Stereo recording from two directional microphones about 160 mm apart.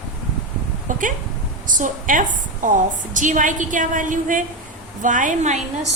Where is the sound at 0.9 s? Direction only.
55° right (ahead or behind).